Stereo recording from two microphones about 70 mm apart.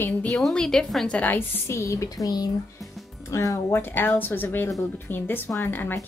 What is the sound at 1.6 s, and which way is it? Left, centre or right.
Speech, left.